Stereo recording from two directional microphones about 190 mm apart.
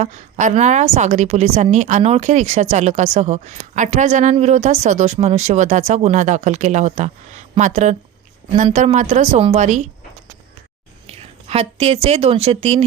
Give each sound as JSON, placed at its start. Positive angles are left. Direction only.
{"t": 0.0, "sound": "a woman's voice", "side_deg": -40}
{"t": 11.0, "sound": "a sound", "side_deg": -30}
{"t": 12.0, "sound": "a woman's voice", "side_deg": -30}